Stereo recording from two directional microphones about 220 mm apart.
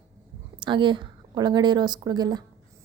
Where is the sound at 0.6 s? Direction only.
20° right (ahead or behind).